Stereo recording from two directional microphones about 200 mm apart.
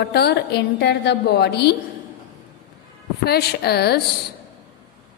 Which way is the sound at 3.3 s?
55° left (ahead or behind).